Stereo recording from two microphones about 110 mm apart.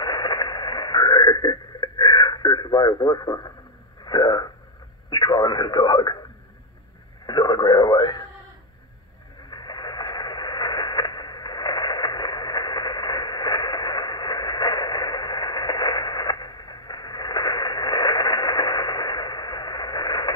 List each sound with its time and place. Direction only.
0.0 s radio: 40° left (ahead or behind)
4.0 s speech: 40° left (ahead or behind)
7.2 s speech: 40° left (ahead or behind)
9.5 s radio: 40° left (ahead or behind)